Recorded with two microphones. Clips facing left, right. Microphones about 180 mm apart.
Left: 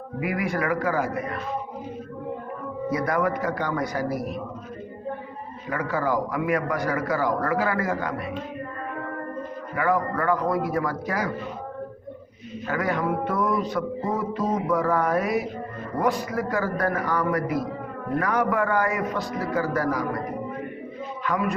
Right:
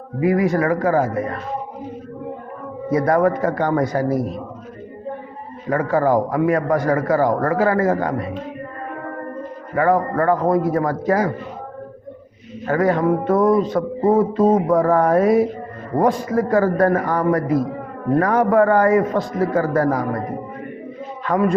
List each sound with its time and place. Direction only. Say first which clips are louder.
0.4 s a man's voice: right 7 dB; 40° right (ahead or behind)
2.9 s a man's voice: right 8 dB; 45° right (ahead or behind)
4.1 s mantra: right 7 dB; 25° right (ahead or behind)
5.6 s a man's voice: right 8 dB; 45° right (ahead or behind)
9.7 s a man's voice: right 7 dB; 45° right (ahead or behind)
12.6 s a man's voice: right 8 dB; 45° right (ahead or behind)
15.2 s mantra: right 10 dB; 30° right (ahead or behind)
16.0 s a man's voice: right 7 dB; 45° right (ahead or behind)
17.3 s a man's voice: right 7 dB; 30° right (ahead or behind)
18.2 s a man's voice: right 8 dB; 45° right (ahead or behind)